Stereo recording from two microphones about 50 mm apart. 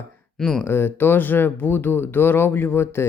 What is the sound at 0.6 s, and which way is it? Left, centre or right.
Speech, left.